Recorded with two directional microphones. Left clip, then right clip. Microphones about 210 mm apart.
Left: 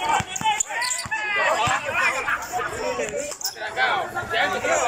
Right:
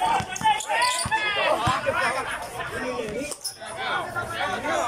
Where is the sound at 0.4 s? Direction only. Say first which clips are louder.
Right 2 dB; centre (ahead or behind).